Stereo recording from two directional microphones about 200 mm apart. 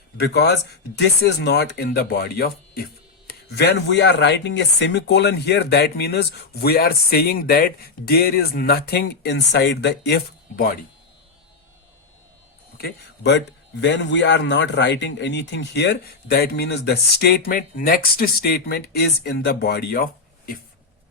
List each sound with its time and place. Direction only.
0.2 s a man's voice: 55° left (ahead or behind)
12.7 s a man's voice: 55° left (ahead or behind)